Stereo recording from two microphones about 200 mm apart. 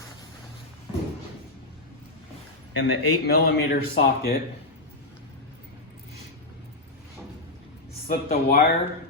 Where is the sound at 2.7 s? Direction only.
60° left (ahead or behind).